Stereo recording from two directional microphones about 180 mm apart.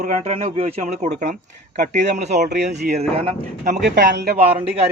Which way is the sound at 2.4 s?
65° right (ahead or behind).